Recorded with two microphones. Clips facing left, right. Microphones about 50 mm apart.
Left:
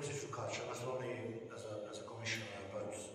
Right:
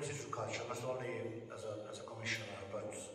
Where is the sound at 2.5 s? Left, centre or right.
Centre.